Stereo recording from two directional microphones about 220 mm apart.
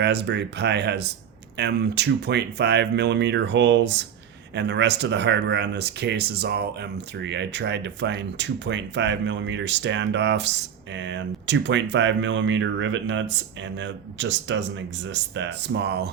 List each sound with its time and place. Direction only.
0.0 s speech: 50° right (ahead or behind)